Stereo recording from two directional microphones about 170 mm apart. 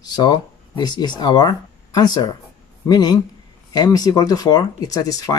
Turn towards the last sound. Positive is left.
turn(degrees=20)  # may be behind; listen again after turning